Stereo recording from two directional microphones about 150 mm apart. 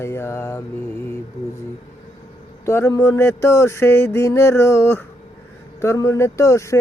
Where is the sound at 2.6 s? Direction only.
20° left (ahead or behind).